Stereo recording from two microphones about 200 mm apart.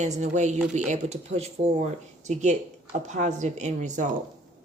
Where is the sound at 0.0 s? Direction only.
35° right (ahead or behind).